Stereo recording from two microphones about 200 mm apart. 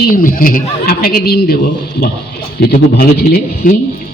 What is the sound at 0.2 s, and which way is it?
Speech, 45° left (ahead or behind).